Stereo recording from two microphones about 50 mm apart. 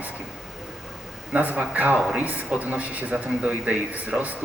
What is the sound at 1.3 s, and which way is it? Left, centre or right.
A man's voice, right.